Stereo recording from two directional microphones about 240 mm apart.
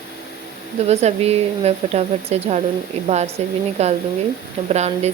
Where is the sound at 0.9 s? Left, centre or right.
Right.